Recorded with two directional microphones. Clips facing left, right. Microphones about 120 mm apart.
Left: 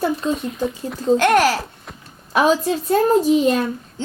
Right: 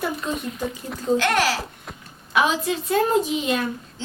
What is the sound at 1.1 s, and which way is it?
A woman's voice, 50° left (ahead or behind).